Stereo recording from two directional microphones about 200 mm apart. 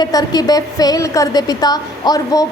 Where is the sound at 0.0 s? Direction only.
20° left (ahead or behind).